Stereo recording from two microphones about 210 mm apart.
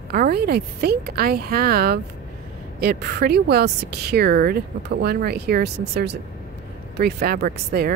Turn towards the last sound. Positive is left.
turn(degrees=-50)  # may be behind; listen again after turning